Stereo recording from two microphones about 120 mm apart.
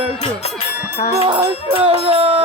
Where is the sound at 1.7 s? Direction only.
55° right (ahead or behind).